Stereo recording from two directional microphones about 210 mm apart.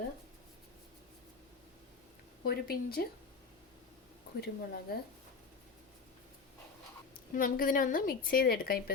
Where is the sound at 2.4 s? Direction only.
50° left (ahead or behind).